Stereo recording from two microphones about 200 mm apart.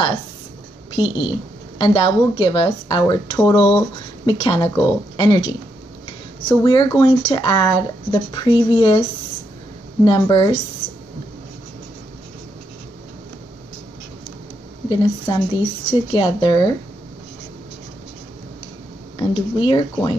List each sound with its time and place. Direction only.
0.9 s speech: 25° left (ahead or behind)
10.0 s speech: 20° left (ahead or behind)
14.9 s speech: 20° left (ahead or behind)
19.1 s speech: 25° left (ahead or behind)